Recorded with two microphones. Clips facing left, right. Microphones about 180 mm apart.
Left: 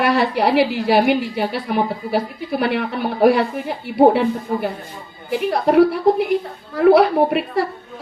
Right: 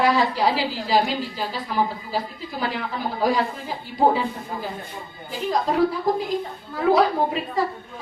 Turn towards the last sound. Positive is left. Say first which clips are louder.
# left 6 dB
turn(degrees=70)  # may be behind; listen again after turning